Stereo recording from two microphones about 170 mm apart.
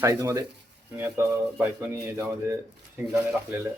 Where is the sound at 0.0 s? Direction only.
15° right (ahead or behind).